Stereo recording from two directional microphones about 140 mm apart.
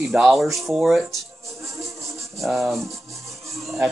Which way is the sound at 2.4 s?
Centre (ahead or behind).